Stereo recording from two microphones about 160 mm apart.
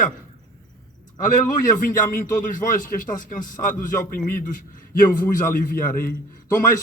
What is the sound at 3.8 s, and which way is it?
Speech, 55° left (ahead or behind).